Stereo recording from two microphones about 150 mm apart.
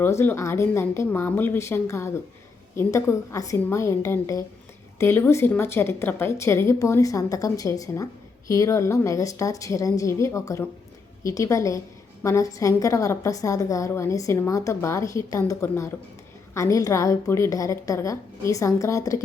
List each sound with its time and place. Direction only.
0.0 s a woman's voice: 15° left (ahead or behind)